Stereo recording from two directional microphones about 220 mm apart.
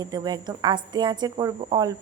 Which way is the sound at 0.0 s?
20° right (ahead or behind).